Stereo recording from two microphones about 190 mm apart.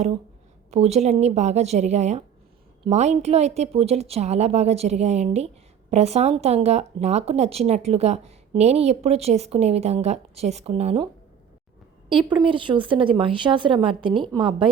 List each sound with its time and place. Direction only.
0.7 s speech: 35° right (ahead or behind)